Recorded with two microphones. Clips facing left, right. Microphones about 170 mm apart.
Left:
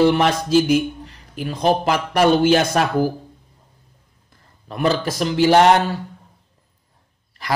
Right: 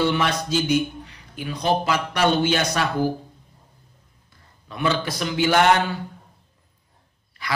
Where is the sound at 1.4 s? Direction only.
45° left (ahead or behind).